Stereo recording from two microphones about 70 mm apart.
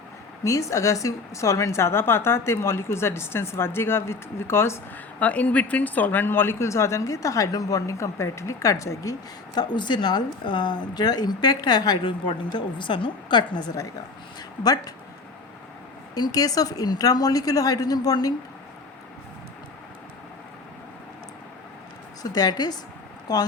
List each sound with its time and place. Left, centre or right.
0.4 s a woman's voice: left
5.2 s a woman's voice: left
9.6 s speech: left
14.6 s a woman's voice: left
16.1 s a woman's voice: left
22.2 s a woman's voice: left